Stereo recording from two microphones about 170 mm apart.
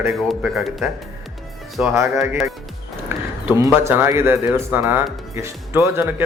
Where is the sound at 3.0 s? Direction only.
15° right (ahead or behind).